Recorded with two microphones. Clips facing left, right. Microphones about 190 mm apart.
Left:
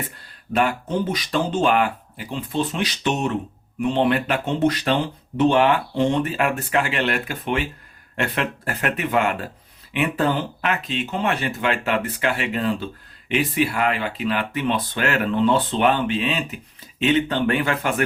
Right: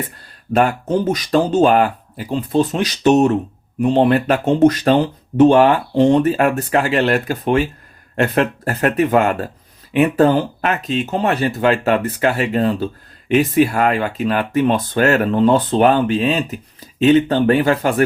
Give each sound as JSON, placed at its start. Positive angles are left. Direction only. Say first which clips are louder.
{"t": 0.5, "sound": "speech", "louder": "right 5 dB", "side_deg": -45}